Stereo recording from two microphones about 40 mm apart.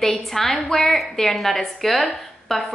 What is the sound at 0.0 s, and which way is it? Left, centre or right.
A woman's voice, centre.